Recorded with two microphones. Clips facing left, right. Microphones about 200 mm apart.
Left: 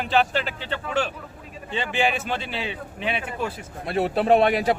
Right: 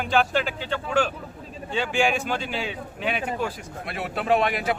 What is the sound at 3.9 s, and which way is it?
Speech, 35° left (ahead or behind).